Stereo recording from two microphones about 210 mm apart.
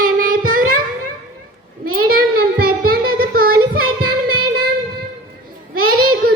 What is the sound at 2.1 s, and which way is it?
Child singing, 45° right (ahead or behind).